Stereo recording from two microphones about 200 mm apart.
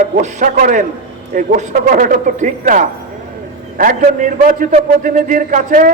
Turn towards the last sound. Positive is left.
turn(degrees=-40)  # may be behind; listen again after turning